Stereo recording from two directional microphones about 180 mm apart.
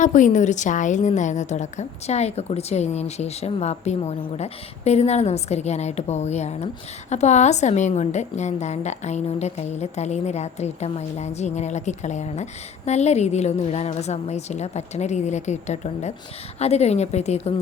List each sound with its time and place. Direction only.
0.0 s a woman's voice: 45° left (ahead or behind)